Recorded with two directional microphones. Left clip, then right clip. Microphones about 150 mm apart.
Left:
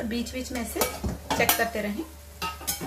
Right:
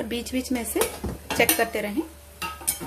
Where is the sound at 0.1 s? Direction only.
55° right (ahead or behind).